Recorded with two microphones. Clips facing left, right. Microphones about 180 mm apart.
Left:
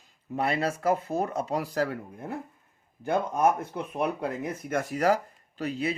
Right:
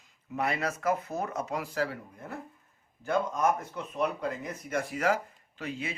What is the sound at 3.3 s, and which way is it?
Speech, 60° left (ahead or behind).